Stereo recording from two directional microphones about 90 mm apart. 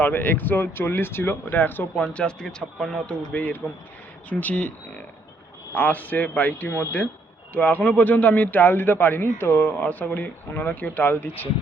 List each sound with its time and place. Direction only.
0.0 s a man's voice: 20° left (ahead or behind); by 3.2 s 5° left (ahead or behind)
3.3 s a man's voice: 20° left (ahead or behind)
5.7 s a man's voice: 20° left (ahead or behind)
6.7 s speech: 30° left (ahead or behind)
7.5 s a man's voice: 20° left (ahead or behind)